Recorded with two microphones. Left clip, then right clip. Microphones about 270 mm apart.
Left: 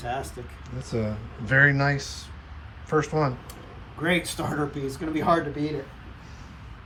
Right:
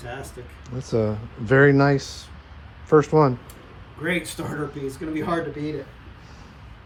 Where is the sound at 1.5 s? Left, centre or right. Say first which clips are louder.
Right 4 dB; right.